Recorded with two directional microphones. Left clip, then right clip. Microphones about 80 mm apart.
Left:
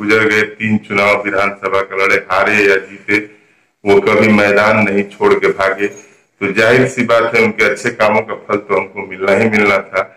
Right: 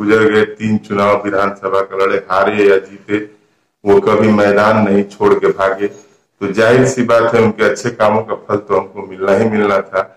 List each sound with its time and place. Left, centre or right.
0.0 s speech: right
1.3 s a man's voice: right
1.9 s a man's voice: right
4.7 s speech: right
5.2 s speech: centre
5.5 s a man's voice: right